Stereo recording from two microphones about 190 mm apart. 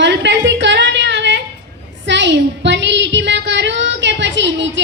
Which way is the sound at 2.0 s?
70° right (ahead or behind).